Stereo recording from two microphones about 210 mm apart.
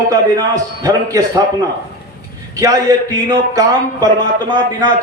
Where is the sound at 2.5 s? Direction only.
15° right (ahead or behind).